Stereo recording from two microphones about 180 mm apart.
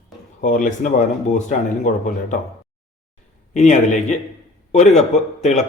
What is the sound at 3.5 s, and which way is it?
Speech, 40° left (ahead or behind).